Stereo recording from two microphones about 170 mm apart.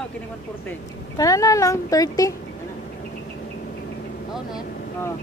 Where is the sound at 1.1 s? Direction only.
20° left (ahead or behind).